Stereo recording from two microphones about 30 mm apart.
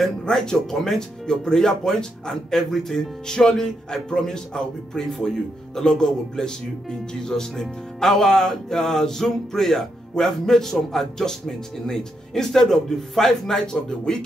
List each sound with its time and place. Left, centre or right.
0.2 s speech: left
2.5 s music: centre
3.5 s speech: centre
7.6 s music: centre
13.7 s speech: left